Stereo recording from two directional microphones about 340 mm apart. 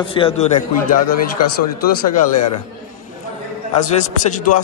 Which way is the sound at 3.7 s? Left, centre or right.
Left.